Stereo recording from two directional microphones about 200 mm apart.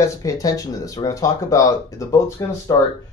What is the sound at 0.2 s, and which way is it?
Speech, 15° left (ahead or behind).